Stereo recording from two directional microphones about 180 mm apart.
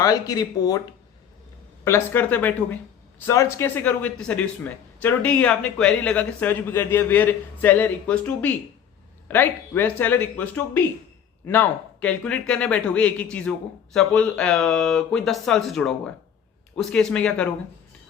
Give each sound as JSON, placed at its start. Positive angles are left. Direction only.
{"t": 0.0, "sound": "speech", "side_deg": 20}
{"t": 1.8, "sound": "speech", "side_deg": 15}